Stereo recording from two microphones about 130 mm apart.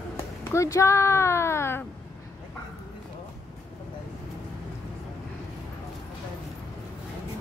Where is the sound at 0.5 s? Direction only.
25° left (ahead or behind).